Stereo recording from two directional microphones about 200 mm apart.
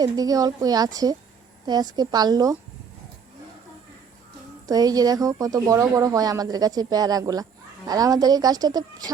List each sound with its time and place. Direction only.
0.0 s a woman's voice: 20° right (ahead or behind)
4.6 s a woman's voice: 20° right (ahead or behind)